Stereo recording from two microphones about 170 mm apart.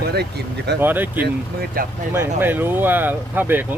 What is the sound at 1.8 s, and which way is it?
Speech, 55° right (ahead or behind).